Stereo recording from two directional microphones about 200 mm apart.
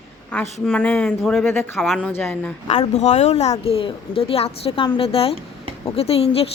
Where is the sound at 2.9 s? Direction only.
35° left (ahead or behind).